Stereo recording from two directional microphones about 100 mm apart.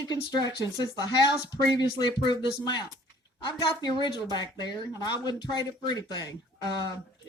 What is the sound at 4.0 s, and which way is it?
Speech, 45° left (ahead or behind).